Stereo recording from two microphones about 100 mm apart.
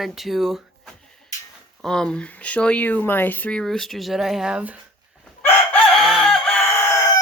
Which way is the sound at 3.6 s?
5° left (ahead or behind).